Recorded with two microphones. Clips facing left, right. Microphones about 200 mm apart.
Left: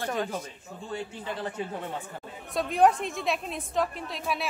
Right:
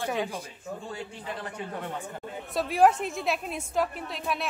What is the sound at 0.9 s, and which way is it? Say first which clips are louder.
Speech: left 3 dB; 25° left (ahead or behind).